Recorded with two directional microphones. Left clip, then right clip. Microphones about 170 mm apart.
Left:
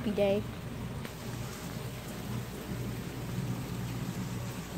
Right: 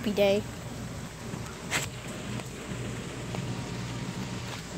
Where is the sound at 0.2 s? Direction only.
15° right (ahead or behind).